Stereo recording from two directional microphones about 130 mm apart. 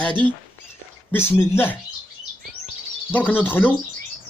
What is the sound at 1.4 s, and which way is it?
Speech, 15° left (ahead or behind).